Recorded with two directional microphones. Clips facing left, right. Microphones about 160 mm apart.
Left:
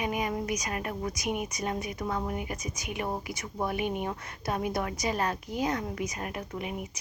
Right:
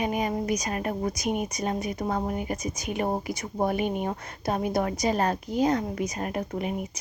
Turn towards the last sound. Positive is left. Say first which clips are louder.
# right 6 dB
turn(degrees=-40)  # may be behind; listen again after turning